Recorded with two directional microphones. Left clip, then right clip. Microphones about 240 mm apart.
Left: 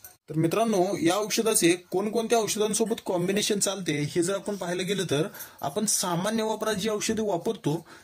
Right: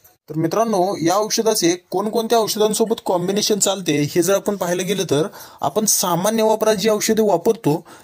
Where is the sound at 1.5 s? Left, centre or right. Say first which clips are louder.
Right 4 dB; centre.